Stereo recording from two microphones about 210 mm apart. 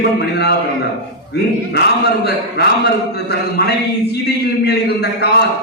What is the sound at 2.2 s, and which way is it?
A man's voice, 50° left (ahead or behind).